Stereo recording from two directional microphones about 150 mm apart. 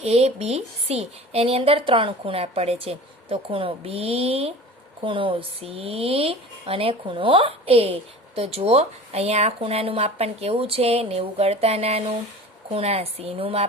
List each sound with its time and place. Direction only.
0.0 s a woman's voice: 45° right (ahead or behind)